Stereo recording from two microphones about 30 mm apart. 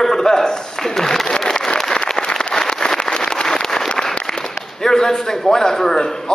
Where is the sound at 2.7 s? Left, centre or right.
Left.